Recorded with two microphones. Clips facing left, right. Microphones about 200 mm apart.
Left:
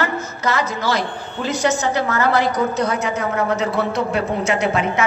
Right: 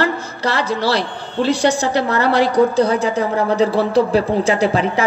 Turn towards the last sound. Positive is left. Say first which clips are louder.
# right 3 dB
turn(degrees=-35)  # may be behind; listen again after turning